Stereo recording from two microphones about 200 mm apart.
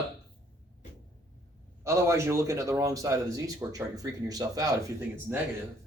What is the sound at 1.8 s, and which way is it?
A man's voice, 15° right (ahead or behind).